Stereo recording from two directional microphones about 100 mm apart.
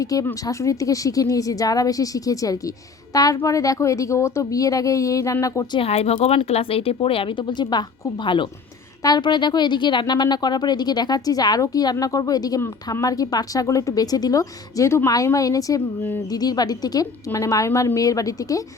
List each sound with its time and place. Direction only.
0.0 s speech: 35° left (ahead or behind)
5.8 s speech: 90° left; by 8.4 s 55° left (ahead or behind)
9.0 s speech: 40° left (ahead or behind)